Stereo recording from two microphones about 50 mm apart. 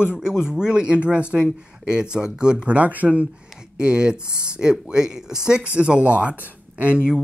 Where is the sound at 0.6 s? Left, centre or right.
Centre.